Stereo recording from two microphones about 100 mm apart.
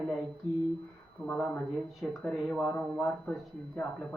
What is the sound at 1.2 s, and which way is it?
Speech, 20° right (ahead or behind).